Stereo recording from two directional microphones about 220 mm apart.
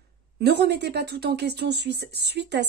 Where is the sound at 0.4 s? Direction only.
50° right (ahead or behind).